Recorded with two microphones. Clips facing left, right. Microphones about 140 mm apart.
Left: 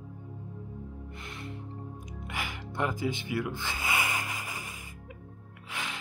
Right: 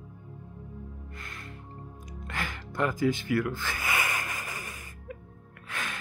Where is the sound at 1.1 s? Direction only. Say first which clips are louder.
Left 3 dB; 25° left (ahead or behind).